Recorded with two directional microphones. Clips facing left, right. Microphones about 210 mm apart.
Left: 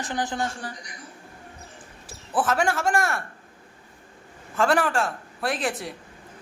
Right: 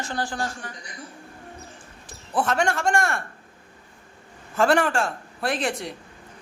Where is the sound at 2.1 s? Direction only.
5° left (ahead or behind).